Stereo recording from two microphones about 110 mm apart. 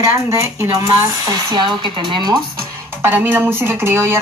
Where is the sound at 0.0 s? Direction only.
30° right (ahead or behind).